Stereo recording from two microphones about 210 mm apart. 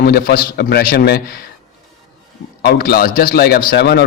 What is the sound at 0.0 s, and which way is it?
Speech, 45° left (ahead or behind).